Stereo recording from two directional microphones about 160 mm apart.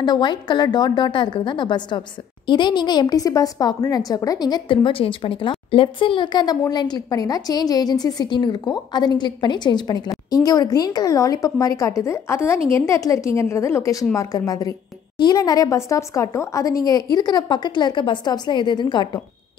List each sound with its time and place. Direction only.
0.0 s a woman's voice: 25° left (ahead or behind)